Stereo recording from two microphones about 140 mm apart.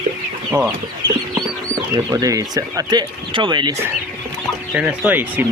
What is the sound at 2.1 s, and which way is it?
Speech, 25° right (ahead or behind).